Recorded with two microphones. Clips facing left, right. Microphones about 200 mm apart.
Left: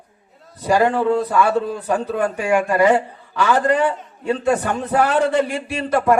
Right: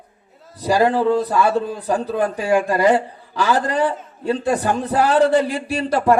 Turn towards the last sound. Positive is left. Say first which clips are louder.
# even
turn(degrees=-35)  # may be behind; listen again after turning